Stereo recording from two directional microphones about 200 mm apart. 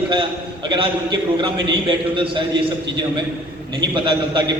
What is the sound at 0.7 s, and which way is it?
A man's voice, 25° right (ahead or behind).